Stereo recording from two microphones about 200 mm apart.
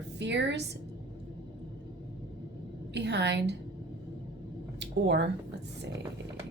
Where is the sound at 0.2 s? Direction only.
60° right (ahead or behind).